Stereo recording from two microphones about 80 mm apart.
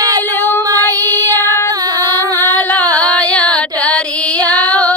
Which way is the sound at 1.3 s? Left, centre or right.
Left.